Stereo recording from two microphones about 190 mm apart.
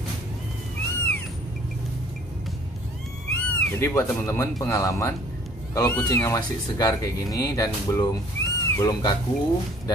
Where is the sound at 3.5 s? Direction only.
15° left (ahead or behind).